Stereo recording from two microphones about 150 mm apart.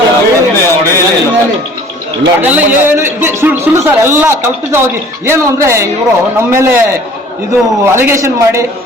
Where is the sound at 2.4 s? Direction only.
15° right (ahead or behind).